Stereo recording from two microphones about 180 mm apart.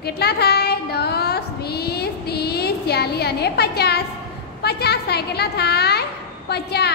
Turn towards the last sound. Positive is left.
turn(degrees=65)  # may be behind; listen again after turning